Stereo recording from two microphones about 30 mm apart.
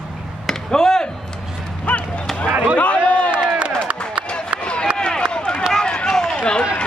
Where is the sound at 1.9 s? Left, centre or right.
Left.